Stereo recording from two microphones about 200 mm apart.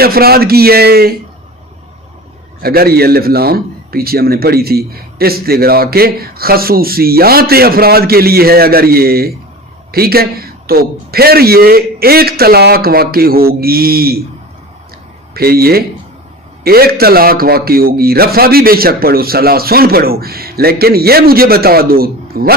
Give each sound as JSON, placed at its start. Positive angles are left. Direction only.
{"t": 0.0, "sound": "a man's voice", "side_deg": -50}
{"t": 2.6, "sound": "a man's voice", "side_deg": -50}
{"t": 15.4, "sound": "a man's voice", "side_deg": -50}